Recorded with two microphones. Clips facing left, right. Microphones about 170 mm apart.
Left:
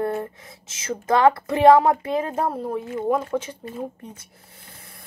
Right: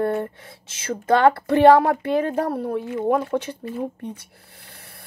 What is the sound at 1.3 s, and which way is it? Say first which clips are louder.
Speech: right 1 dB; 65° right (ahead or behind).